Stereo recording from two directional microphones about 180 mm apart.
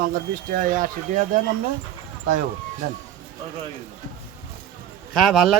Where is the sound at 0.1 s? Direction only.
45° right (ahead or behind).